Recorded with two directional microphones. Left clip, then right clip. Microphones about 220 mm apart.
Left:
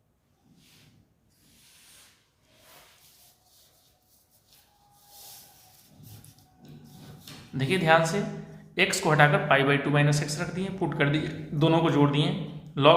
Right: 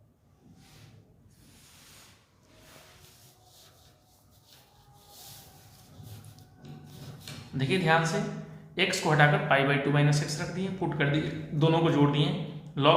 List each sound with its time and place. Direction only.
7.5 s a man's voice: 30° left (ahead or behind)